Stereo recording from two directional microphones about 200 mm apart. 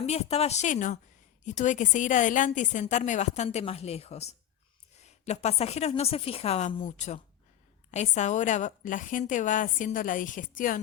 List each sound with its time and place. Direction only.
0.0 s a woman's voice: 30° left (ahead or behind)